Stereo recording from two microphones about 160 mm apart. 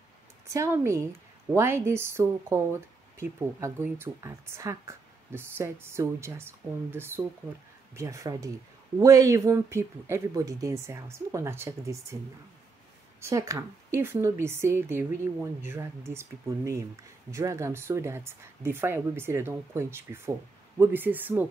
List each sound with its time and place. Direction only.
0.5 s speech: 20° right (ahead or behind)
13.2 s speech: 20° right (ahead or behind)